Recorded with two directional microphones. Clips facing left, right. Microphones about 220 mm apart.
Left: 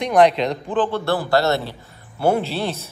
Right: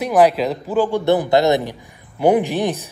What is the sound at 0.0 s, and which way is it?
Speech, 5° right (ahead or behind).